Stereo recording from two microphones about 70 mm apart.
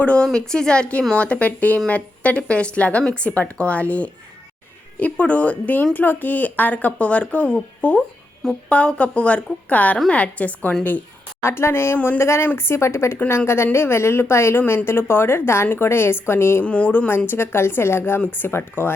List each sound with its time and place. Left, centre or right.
0.0 s a woman's voice: centre
11.4 s a woman's voice: left
16.6 s a woman's voice: centre
17.1 s a woman's voice: left